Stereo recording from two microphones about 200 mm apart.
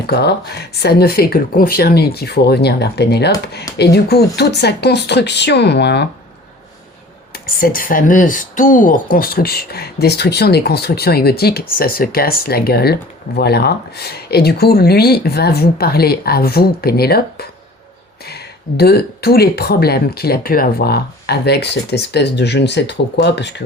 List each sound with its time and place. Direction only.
0.1 s speech: 55° left (ahead or behind)
7.3 s speech: 45° left (ahead or behind)